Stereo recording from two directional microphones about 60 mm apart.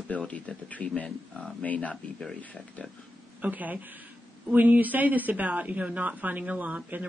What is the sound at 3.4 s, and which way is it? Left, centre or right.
Speech, right.